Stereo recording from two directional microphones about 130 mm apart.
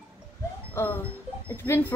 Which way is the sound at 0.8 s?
20° left (ahead or behind).